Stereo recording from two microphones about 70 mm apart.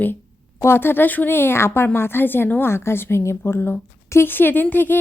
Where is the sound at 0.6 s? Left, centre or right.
Left.